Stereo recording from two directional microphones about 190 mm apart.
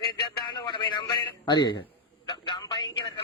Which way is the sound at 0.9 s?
20° left (ahead or behind).